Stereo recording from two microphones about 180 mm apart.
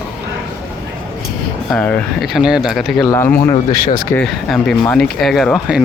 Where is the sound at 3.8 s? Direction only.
50° left (ahead or behind).